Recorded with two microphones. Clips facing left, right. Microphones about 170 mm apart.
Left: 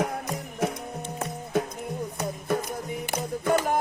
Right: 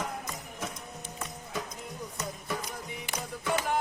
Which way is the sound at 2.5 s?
50° left (ahead or behind).